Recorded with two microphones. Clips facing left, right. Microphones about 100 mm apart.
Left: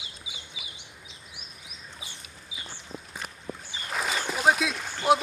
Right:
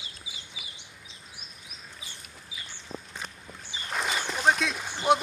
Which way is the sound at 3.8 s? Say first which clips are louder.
Even; centre (ahead or behind).